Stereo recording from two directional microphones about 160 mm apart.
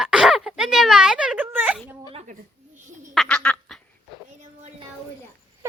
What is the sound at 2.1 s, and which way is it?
Speech, 45° right (ahead or behind).